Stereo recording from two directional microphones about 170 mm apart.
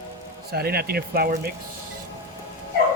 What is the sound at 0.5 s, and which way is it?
Speech, 65° right (ahead or behind).